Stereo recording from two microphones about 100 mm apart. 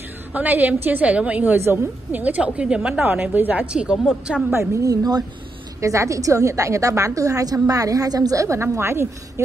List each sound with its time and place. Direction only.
0.3 s a woman's voice: 15° right (ahead or behind)
4.5 s a woman's voice: 30° right (ahead or behind)